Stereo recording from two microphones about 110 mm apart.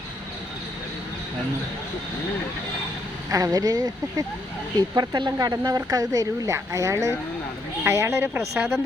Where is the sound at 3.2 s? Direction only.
30° right (ahead or behind).